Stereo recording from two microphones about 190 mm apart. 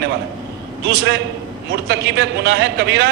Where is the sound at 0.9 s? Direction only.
60° right (ahead or behind).